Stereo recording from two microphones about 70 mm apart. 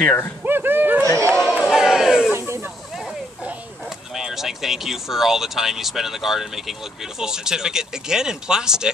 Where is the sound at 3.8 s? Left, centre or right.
Centre.